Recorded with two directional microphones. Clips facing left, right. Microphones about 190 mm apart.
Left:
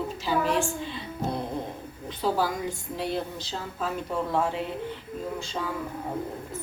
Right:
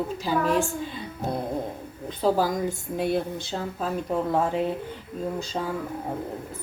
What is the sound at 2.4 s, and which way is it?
Speech, 50° right (ahead or behind).